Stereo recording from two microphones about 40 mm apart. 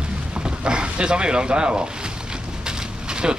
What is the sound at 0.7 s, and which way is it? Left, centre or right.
Speech, right.